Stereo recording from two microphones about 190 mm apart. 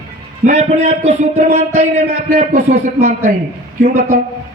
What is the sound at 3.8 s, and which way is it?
Speech, 50° right (ahead or behind).